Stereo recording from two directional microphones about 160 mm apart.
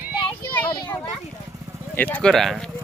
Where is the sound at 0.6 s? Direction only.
30° left (ahead or behind).